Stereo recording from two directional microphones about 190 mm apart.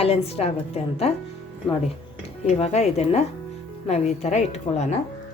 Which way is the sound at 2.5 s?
35° left (ahead or behind).